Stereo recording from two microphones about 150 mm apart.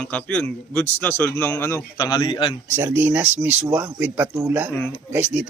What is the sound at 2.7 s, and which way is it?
Speech, 15° right (ahead or behind).